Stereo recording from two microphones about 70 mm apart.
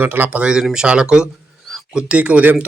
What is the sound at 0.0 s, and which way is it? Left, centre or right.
Speech, right.